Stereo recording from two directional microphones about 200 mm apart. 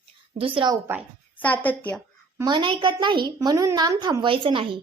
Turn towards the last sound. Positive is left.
turn(degrees=-25)  # may be behind; listen again after turning